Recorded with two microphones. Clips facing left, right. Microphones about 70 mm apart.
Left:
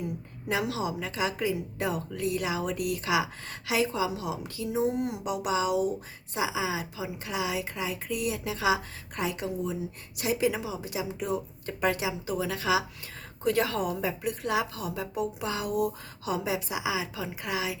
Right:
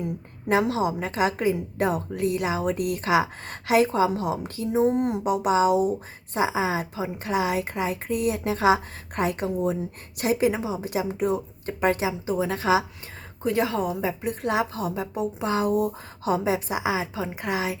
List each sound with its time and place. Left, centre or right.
0.0 s a woman's voice: right
10.8 s a woman's voice: right
13.4 s a woman's voice: centre; by 17.7 s right